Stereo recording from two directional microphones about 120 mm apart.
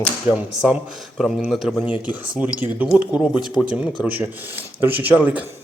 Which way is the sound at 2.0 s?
15° right (ahead or behind).